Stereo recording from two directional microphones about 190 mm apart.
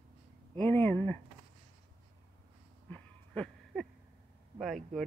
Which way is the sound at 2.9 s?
5° left (ahead or behind).